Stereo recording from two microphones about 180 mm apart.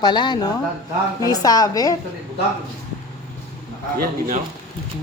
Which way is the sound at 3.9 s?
55° right (ahead or behind).